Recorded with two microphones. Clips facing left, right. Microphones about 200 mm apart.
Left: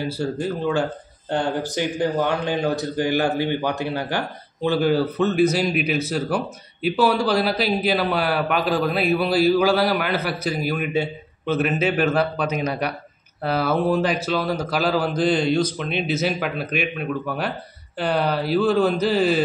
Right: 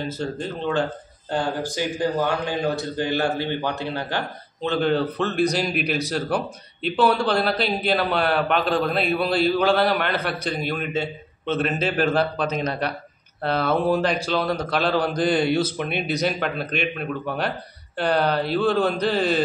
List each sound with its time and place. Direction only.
0.2 s a man's voice: 10° left (ahead or behind)